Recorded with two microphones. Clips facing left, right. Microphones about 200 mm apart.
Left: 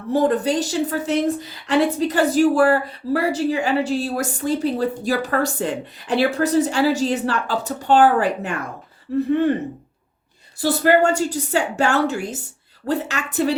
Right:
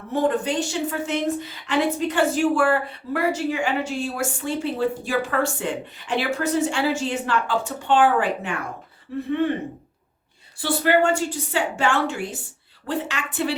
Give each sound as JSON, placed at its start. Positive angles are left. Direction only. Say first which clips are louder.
{"t": 0.1, "sound": "a woman's voice", "louder": "left 4 dB", "side_deg": 40}
{"t": 10.6, "sound": "a woman's voice", "louder": "left 3 dB", "side_deg": 40}